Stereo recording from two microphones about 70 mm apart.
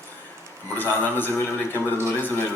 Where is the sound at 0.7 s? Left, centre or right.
Left.